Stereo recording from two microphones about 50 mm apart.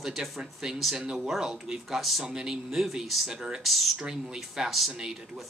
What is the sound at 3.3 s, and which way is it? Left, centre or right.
Speech, centre.